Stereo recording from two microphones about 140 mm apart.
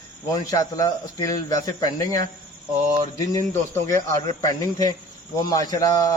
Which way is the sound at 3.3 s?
20° left (ahead or behind).